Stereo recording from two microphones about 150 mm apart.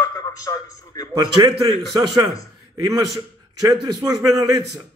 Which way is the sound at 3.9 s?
25° right (ahead or behind).